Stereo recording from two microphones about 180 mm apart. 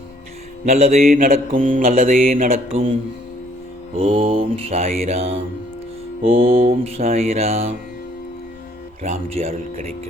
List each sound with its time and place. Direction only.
0.7 s mantra: 40° right (ahead or behind)
1.0 s mantra: 55° right (ahead or behind)
3.9 s mantra: 30° right (ahead or behind)
6.5 s mantra: 30° right (ahead or behind)
9.0 s mantra: 35° right (ahead or behind)